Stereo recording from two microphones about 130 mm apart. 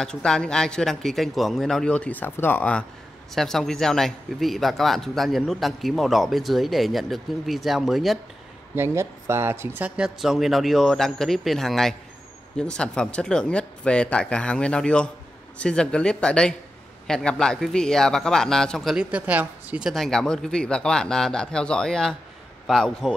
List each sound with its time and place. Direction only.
0.0 s a man's voice: 5° left (ahead or behind)
8.7 s a man's voice: 20° right (ahead or behind)
19.9 s a man's voice: 5° left (ahead or behind)